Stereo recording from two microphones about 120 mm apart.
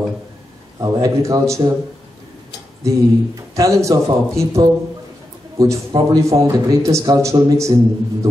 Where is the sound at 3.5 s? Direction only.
25° right (ahead or behind).